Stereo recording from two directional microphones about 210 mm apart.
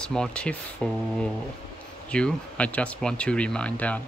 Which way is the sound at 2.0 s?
5° left (ahead or behind).